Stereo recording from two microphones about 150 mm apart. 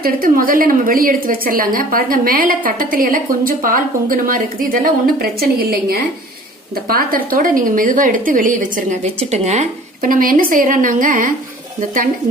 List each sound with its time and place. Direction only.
0.0 s a woman's voice: 70° right (ahead or behind); by 6.0 s 90° right
6.8 s a woman's voice: 75° right (ahead or behind)
9.3 s speech: 45° right (ahead or behind)
10.0 s a woman's voice: 70° right (ahead or behind)